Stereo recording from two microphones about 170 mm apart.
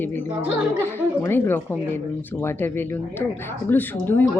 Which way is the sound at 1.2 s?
10° left (ahead or behind).